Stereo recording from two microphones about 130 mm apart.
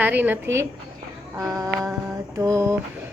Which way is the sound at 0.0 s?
15° right (ahead or behind).